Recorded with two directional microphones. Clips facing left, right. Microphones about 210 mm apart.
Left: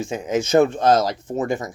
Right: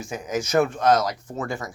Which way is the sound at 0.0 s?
25° left (ahead or behind).